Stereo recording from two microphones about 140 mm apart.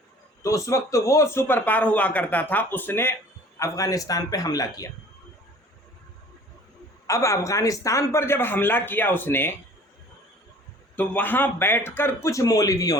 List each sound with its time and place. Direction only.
0.4 s a man's voice: 25° left (ahead or behind)
7.1 s a man's voice: 20° left (ahead or behind)
10.9 s a man's voice: 10° left (ahead or behind)